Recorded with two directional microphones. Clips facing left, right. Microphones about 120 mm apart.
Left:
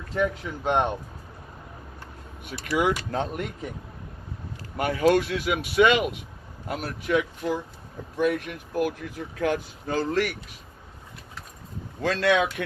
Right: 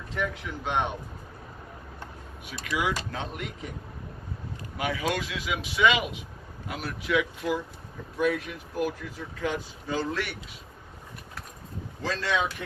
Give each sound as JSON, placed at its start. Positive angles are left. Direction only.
{"t": 0.6, "sound": "speech", "side_deg": 50}
{"t": 2.4, "sound": "speech", "side_deg": 50}
{"t": 4.8, "sound": "speech", "side_deg": 45}
{"t": 8.2, "sound": "speech", "side_deg": 55}
{"t": 12.0, "sound": "speech", "side_deg": 65}